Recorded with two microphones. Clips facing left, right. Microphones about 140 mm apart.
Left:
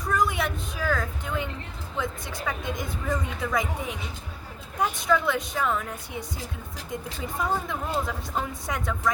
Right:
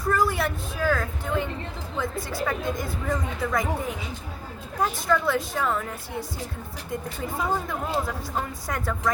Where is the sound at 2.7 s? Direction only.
20° left (ahead or behind).